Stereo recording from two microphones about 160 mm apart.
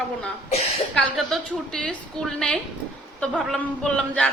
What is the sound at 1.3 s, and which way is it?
A woman's voice, 5° left (ahead or behind).